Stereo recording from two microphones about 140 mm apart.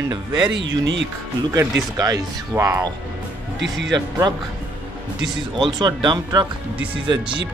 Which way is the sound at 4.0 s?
30° right (ahead or behind).